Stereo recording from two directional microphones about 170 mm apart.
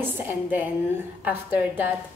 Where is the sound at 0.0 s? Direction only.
10° right (ahead or behind).